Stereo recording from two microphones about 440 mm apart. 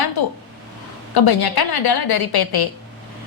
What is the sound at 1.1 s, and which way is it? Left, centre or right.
A woman's voice, left.